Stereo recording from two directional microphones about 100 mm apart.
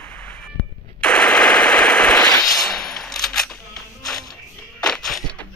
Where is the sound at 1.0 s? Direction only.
10° left (ahead or behind).